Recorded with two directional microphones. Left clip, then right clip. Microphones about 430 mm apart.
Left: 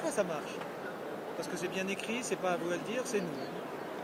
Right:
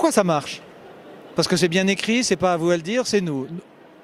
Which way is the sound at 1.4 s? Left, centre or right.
Right.